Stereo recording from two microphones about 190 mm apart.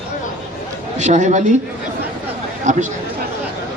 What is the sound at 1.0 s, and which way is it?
Speech, 40° right (ahead or behind).